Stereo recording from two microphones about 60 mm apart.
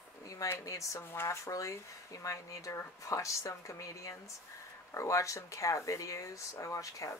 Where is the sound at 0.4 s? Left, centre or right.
Left.